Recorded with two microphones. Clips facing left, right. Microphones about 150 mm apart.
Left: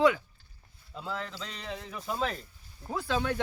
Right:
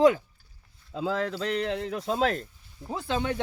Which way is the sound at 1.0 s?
90° right.